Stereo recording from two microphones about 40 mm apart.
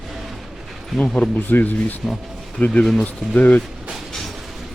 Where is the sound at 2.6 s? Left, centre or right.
Left.